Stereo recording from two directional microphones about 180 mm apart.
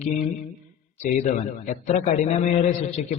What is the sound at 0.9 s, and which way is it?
A man's voice, 40° left (ahead or behind).